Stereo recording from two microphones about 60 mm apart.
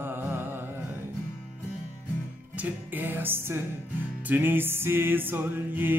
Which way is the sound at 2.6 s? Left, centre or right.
Right.